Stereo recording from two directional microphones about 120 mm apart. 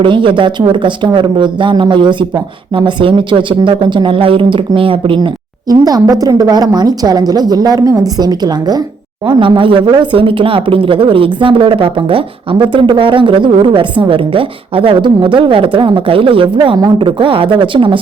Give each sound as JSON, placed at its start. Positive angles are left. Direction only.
{"t": 0.0, "sound": "a woman's voice", "side_deg": -45}